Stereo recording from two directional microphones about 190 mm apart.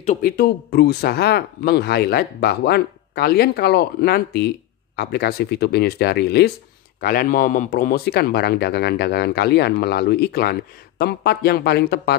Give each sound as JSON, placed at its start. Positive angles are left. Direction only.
{"t": 0.0, "sound": "speech", "side_deg": 40}
{"t": 0.4, "sound": "a man's voice", "side_deg": 55}